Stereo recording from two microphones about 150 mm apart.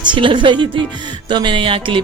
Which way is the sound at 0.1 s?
35° right (ahead or behind).